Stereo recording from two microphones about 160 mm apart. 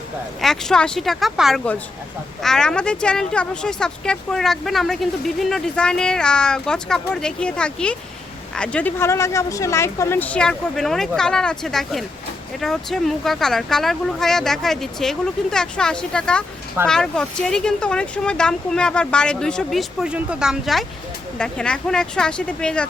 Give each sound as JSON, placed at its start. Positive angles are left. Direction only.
{"t": 0.4, "sound": "speech", "side_deg": 5}